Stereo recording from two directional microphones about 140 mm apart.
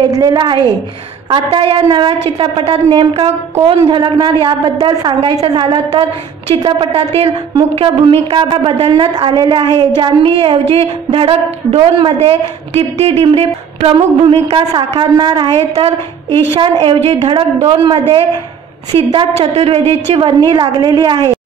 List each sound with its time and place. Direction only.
0.1 s a woman's voice: 30° right (ahead or behind)
19.1 s a woman's voice: 45° right (ahead or behind)